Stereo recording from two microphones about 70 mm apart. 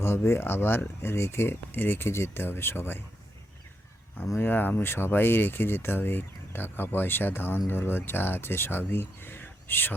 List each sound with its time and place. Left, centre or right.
0.0 s speech: left
4.4 s speech: left